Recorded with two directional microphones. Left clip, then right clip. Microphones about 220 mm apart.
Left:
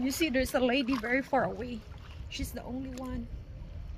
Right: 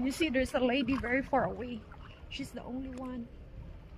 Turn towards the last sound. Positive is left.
turn(degrees=25)  # may be behind; listen again after turning